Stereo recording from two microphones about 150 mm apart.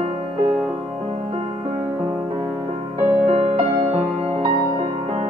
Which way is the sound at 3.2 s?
40° right (ahead or behind).